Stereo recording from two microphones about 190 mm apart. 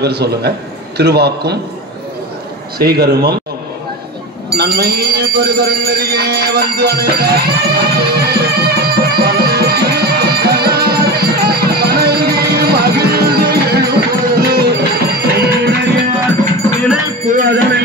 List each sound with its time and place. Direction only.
0.0 s a man's voice: 60° right (ahead or behind)
2.8 s a man's voice: 55° right (ahead or behind)
4.5 s a sound: 55° right (ahead or behind)
17.3 s speech: 55° right (ahead or behind)